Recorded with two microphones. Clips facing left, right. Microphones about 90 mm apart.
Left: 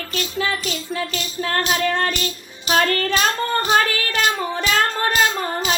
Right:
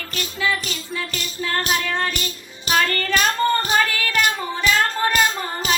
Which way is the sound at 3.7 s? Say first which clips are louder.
Left 1 dB; 40° left (ahead or behind).